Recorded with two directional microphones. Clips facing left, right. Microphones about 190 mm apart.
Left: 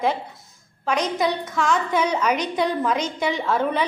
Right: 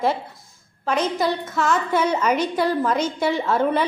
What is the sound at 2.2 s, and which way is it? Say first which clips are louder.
A woman's voice: right 2 dB; 15° left (ahead or behind).